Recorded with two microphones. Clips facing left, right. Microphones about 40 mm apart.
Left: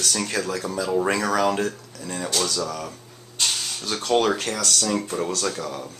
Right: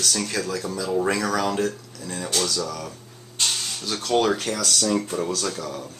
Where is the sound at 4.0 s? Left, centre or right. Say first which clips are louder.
Even; centre.